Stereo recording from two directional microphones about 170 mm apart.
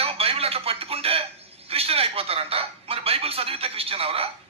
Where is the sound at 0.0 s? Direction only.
35° right (ahead or behind).